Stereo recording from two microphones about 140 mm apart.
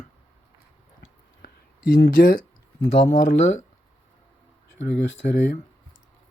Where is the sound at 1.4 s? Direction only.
90° left.